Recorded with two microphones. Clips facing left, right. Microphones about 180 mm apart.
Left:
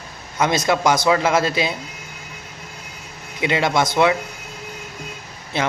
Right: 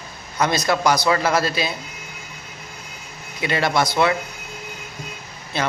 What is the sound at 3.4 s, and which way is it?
Speech, 20° left (ahead or behind).